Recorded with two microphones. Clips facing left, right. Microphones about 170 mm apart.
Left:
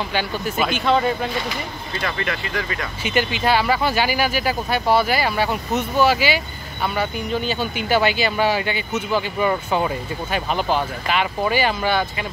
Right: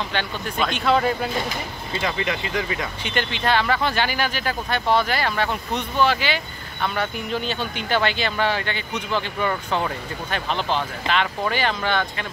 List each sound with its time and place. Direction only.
0.1 s speech: 5° left (ahead or behind)
2.0 s speech: 15° right (ahead or behind)
3.0 s speech: 5° left (ahead or behind)